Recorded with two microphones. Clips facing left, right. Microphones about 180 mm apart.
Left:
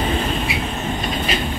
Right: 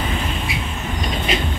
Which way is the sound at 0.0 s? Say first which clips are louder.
Left 4 dB; 35° left (ahead or behind).